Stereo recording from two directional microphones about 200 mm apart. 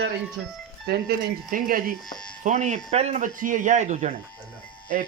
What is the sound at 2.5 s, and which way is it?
A man's voice, 35° right (ahead or behind).